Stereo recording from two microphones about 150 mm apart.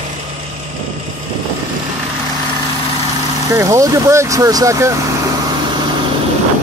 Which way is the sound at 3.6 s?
20° right (ahead or behind).